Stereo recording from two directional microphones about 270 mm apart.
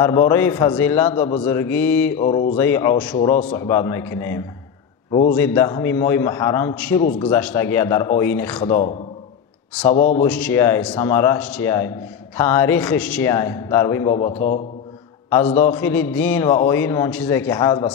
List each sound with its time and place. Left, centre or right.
0.0 s a man's voice: centre
9.9 s a man's voice: left
10.2 s a man's voice: centre